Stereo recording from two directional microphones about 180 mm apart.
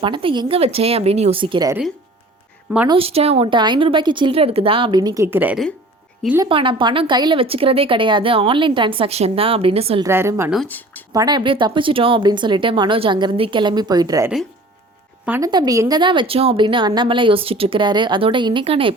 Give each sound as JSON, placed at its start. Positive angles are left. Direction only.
{"t": 0.0, "sound": "speech", "side_deg": -30}
{"t": 2.8, "sound": "a woman's voice", "side_deg": -30}
{"t": 6.4, "sound": "a woman's voice", "side_deg": -30}
{"t": 10.0, "sound": "a woman's voice", "side_deg": -15}
{"t": 10.5, "sound": "speech", "side_deg": 5}
{"t": 11.1, "sound": "a woman's voice", "side_deg": -20}
{"t": 15.3, "sound": "a woman's voice", "side_deg": -20}